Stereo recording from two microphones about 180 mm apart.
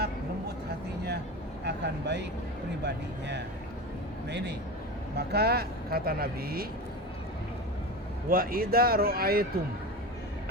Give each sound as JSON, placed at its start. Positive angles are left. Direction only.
{"t": 1.6, "sound": "speech", "side_deg": -70}
{"t": 8.3, "sound": "speech", "side_deg": -55}